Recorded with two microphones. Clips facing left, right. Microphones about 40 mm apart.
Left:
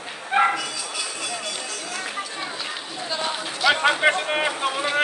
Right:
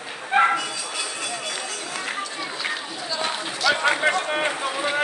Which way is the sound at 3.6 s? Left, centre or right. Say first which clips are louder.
Left 2 dB; centre.